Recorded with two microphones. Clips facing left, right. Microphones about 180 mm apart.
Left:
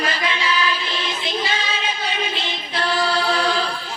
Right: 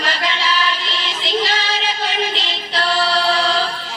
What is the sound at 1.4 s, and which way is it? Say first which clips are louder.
Music: right 3 dB; 85° right.